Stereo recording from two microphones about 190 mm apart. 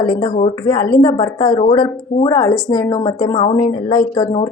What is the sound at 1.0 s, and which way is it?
A woman's voice, 25° left (ahead or behind).